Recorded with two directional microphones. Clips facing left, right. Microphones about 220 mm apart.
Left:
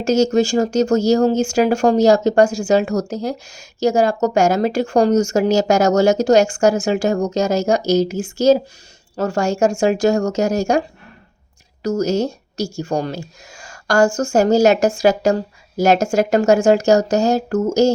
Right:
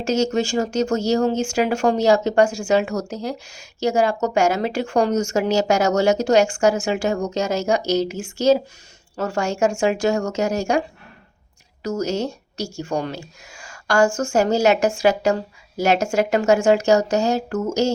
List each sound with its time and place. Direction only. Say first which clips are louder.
0.0 s speech: left 5 dB; 40° left (ahead or behind)